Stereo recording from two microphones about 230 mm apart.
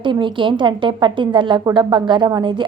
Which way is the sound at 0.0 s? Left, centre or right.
Right.